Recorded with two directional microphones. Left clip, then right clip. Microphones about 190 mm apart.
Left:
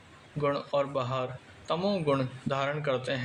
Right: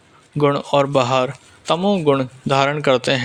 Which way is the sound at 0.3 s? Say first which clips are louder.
Right 12 dB; 45° right (ahead or behind).